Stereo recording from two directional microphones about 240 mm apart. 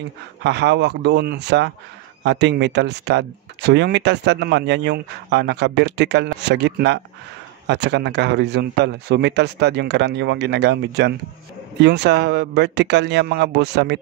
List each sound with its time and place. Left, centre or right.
0.4 s speech: right